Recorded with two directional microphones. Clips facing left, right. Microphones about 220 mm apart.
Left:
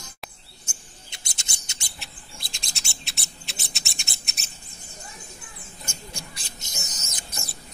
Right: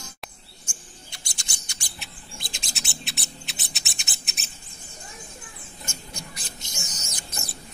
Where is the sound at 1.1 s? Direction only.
20° left (ahead or behind).